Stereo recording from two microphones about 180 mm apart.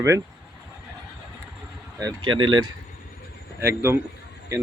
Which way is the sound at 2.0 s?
20° right (ahead or behind).